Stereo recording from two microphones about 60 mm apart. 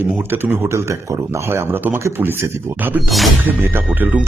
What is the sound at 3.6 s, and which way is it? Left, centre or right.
Speech, right.